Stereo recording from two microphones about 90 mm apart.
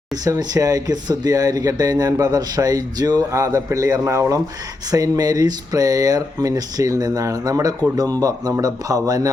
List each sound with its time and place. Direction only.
0.3 s speech: 40° right (ahead or behind)
4.9 s speech: 45° right (ahead or behind)